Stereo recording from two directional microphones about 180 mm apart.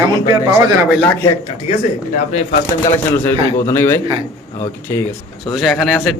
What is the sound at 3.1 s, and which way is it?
Speech, 15° left (ahead or behind).